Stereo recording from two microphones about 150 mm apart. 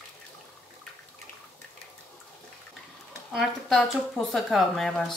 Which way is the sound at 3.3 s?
5° right (ahead or behind).